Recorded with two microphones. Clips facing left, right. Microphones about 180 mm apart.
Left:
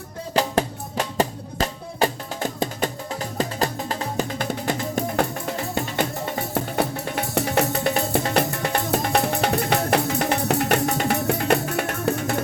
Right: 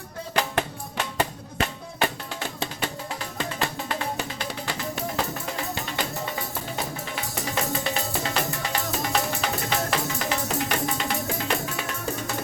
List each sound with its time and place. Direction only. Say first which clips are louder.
0.3 s music: left 5 dB; 35° left (ahead or behind)
6.5 s music: left 8 dB; 60° left (ahead or behind)